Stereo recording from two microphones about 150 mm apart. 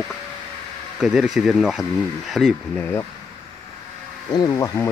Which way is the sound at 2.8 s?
15° left (ahead or behind).